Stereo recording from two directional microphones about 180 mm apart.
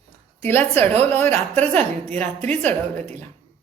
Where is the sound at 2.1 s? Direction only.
10° left (ahead or behind).